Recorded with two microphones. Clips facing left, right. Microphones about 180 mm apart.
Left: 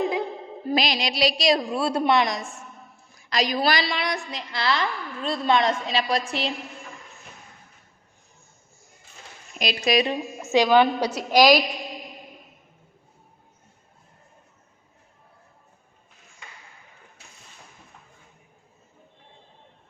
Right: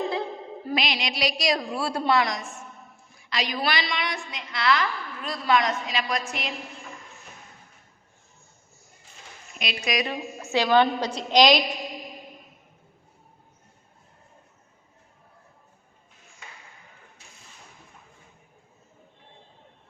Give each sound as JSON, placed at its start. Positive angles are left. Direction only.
{"t": 0.7, "sound": "a woman's voice", "side_deg": 35}
{"t": 3.2, "sound": "a woman's voice", "side_deg": 40}
{"t": 9.6, "sound": "a woman's voice", "side_deg": 35}
{"t": 10.1, "sound": "a woman's voice", "side_deg": 15}